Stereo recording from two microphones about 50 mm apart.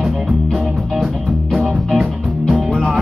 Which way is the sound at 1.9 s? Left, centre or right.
Centre.